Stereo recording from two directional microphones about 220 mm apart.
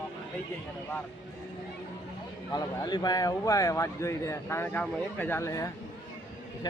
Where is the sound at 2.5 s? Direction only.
20° left (ahead or behind).